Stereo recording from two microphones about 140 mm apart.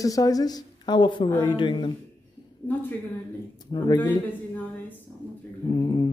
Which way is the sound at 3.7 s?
30° left (ahead or behind).